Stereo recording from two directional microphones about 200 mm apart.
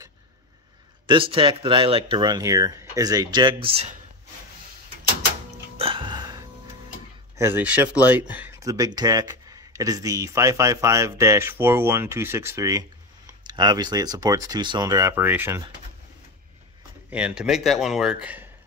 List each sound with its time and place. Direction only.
1.0 s speech: 25° right (ahead or behind)
5.8 s music: 25° right (ahead or behind)
7.3 s speech: 10° right (ahead or behind)
17.1 s speech: 5° right (ahead or behind)